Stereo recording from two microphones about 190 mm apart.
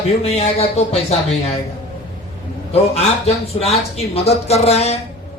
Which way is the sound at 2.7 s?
35° left (ahead or behind).